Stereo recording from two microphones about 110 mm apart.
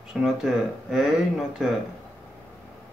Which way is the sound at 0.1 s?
5° right (ahead or behind).